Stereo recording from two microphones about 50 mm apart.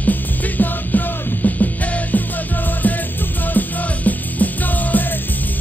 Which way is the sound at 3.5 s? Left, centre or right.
Left.